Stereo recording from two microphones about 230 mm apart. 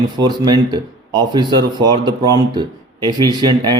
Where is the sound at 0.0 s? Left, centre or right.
Centre.